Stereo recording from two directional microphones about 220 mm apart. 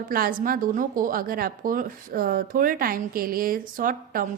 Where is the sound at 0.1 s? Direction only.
40° right (ahead or behind).